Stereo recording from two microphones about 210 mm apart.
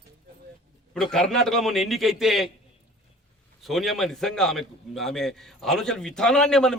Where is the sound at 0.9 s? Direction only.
5° left (ahead or behind).